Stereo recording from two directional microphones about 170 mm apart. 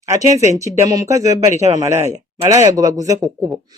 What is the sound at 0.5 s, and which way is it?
Speech, 20° right (ahead or behind).